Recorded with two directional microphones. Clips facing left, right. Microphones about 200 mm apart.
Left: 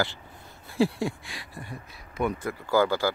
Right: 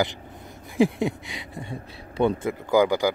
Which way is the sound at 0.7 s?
20° right (ahead or behind).